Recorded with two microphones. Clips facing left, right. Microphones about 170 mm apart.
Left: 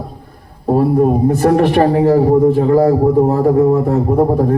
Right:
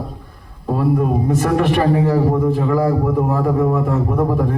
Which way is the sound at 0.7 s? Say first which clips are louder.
Left 6 dB; 35° left (ahead or behind).